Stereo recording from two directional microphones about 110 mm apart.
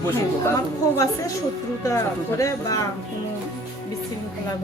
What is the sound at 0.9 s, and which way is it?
Speech, 30° left (ahead or behind).